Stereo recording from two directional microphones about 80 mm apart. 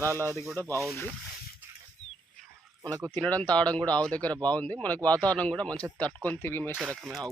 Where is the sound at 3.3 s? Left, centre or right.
Centre.